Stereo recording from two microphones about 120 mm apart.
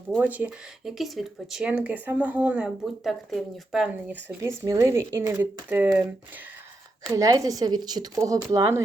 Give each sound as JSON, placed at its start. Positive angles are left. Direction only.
{"t": 0.2, "sound": "speech", "side_deg": -15}
{"t": 0.9, "sound": "speech", "side_deg": 0}
{"t": 2.8, "sound": "speech", "side_deg": 0}
{"t": 4.4, "sound": "speech", "side_deg": -25}
{"t": 7.0, "sound": "speech", "side_deg": -30}